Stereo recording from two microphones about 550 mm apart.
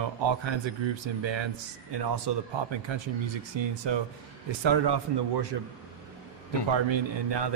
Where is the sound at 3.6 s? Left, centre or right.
Right.